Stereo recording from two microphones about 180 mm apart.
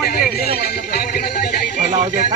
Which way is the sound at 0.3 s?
60° left (ahead or behind).